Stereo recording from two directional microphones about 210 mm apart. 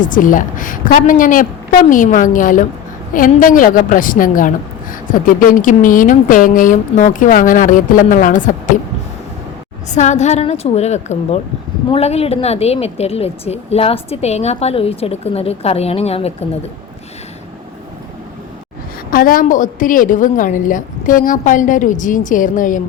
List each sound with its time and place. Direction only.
0.0 s a woman's voice: 40° left (ahead or behind)
9.9 s a woman's voice: 35° left (ahead or behind)
19.1 s a woman's voice: 40° left (ahead or behind)